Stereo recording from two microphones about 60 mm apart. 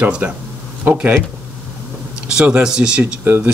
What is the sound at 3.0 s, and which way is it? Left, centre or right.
Speech, right.